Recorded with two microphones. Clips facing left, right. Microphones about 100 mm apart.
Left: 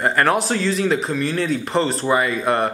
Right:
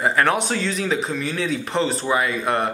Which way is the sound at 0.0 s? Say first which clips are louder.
Left 1 dB; centre (ahead or behind).